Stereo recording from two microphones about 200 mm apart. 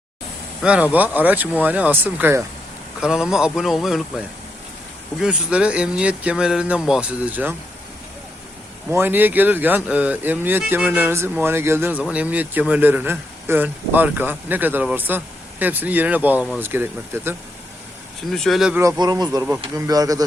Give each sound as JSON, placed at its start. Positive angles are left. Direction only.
{"t": 0.6, "sound": "a man's voice", "side_deg": -5}
{"t": 5.2, "sound": "speech", "side_deg": -5}
{"t": 8.9, "sound": "a man's voice", "side_deg": -10}
{"t": 18.3, "sound": "speech", "side_deg": 0}
{"t": 18.8, "sound": "a man's voice", "side_deg": -20}